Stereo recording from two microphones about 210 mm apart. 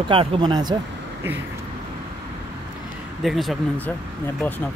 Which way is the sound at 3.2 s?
Centre (ahead or behind).